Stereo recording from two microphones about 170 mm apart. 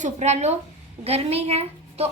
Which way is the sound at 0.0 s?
40° right (ahead or behind).